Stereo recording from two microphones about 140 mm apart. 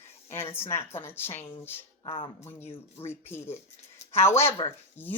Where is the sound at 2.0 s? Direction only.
40° left (ahead or behind).